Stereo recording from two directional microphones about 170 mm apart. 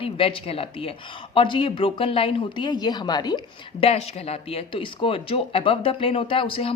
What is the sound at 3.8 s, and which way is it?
Speech, 35° left (ahead or behind).